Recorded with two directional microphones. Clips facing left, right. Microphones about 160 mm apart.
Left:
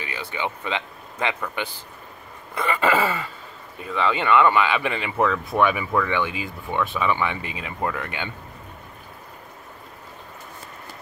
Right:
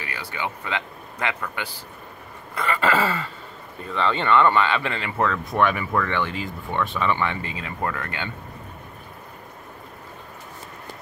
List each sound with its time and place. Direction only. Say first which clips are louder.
0.0 s speech: left 2 dB; 20° left (ahead or behind)
2.5 s dog: left 1 dB; 20° left (ahead or behind)
3.8 s speech: left 1 dB; 10° left (ahead or behind)